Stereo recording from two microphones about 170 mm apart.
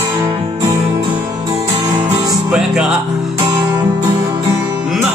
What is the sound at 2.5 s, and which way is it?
Music, 5° right (ahead or behind).